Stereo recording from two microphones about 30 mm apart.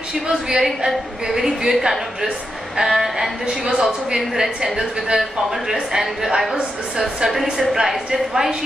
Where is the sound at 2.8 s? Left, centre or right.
Centre.